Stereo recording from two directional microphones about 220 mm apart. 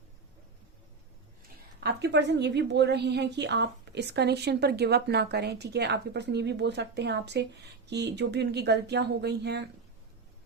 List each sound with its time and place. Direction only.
1.8 s a woman's voice: 50° right (ahead or behind)